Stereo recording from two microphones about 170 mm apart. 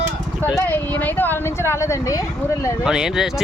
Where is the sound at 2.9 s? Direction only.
5° right (ahead or behind).